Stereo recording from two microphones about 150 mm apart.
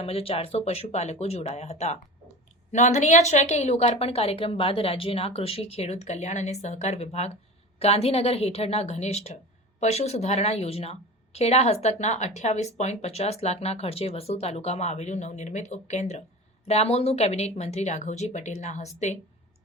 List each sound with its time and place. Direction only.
0.0 s speech: 40° left (ahead or behind)